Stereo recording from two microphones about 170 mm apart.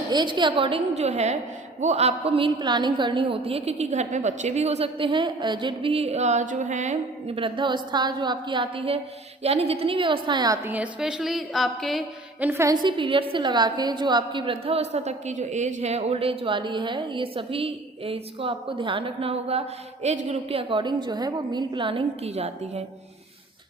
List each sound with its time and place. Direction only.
0.1 s a woman's voice: 25° right (ahead or behind); by 7.3 s 45° right (ahead or behind)
7.3 s a woman's voice: 30° right (ahead or behind)
10.6 s a woman's voice: 10° right (ahead or behind)
12.5 s a woman's voice: 15° right (ahead or behind)
12.8 s a woman's voice: 30° right (ahead or behind)